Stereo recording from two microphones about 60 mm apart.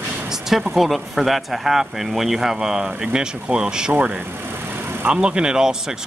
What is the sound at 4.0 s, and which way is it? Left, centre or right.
Vehicle, right.